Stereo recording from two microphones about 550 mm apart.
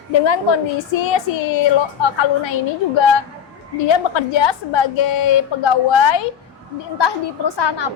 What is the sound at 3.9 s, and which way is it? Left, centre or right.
A woman's voice, left.